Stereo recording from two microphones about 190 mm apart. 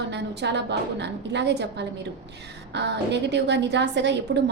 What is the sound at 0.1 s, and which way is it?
A woman's voice, 65° right (ahead or behind).